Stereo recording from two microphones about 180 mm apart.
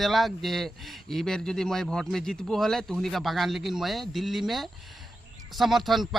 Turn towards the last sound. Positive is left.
turn(degrees=0)  # may be behind; listen again after turning